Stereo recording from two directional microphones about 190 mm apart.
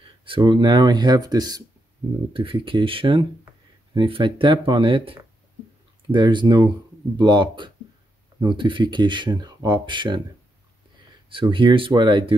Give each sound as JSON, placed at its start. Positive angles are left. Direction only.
{"t": 0.2, "sound": "speech", "side_deg": -25}
{"t": 11.2, "sound": "speech", "side_deg": -25}